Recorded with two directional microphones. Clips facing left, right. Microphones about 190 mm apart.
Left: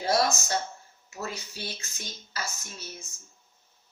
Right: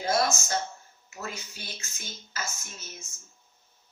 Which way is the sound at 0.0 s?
35° left (ahead or behind).